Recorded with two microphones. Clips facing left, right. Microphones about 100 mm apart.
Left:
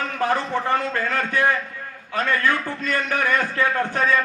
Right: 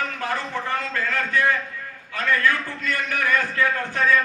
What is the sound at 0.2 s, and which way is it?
A man's voice, 25° left (ahead or behind).